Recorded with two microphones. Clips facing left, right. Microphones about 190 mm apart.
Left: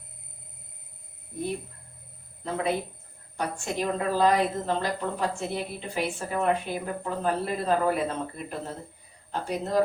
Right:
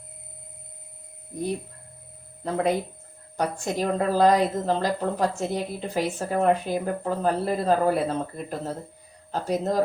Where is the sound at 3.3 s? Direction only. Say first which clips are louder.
Right 4 dB; 40° right (ahead or behind).